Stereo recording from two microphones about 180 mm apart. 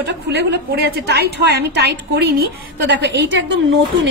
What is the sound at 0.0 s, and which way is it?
A woman's voice, 70° right (ahead or behind).